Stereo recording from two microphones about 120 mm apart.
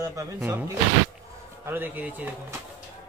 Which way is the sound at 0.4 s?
15° right (ahead or behind).